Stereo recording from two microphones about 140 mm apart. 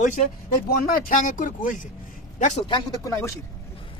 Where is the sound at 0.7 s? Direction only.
85° left; by 1.7 s 65° left (ahead or behind).